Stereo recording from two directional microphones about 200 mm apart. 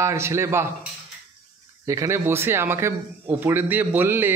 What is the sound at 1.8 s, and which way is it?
Speech, 15° right (ahead or behind).